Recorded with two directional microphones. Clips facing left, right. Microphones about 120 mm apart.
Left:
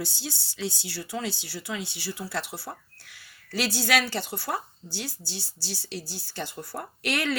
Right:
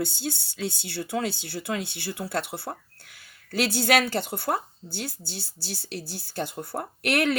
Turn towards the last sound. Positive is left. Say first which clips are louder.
# right 4 dB
turn(degrees=-55)  # may be behind; listen again after turning